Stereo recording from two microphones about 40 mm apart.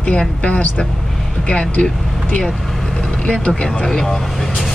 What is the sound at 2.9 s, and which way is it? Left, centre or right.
Vehicle, centre.